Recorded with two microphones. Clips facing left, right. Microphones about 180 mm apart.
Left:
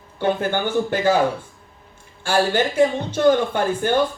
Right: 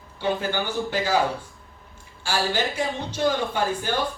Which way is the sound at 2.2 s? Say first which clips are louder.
Left 6 dB; 55° left (ahead or behind).